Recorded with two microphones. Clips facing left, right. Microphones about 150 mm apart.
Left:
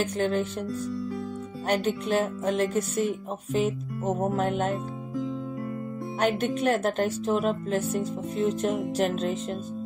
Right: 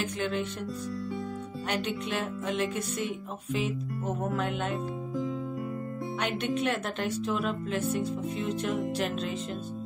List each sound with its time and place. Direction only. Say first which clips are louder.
0.2 s speech: left 5 dB; 35° left (ahead or behind)
1.7 s speech: left 7 dB; 40° left (ahead or behind)
4.2 s speech: left 5 dB; 40° left (ahead or behind)
6.2 s speech: left 6 dB; 40° left (ahead or behind)
8.9 s music: left 5 dB; 45° left (ahead or behind)